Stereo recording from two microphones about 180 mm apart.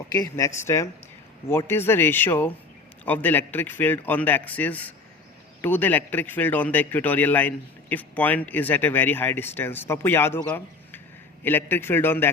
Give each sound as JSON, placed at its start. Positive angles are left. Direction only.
{"t": 0.1, "sound": "a man's voice", "side_deg": 20}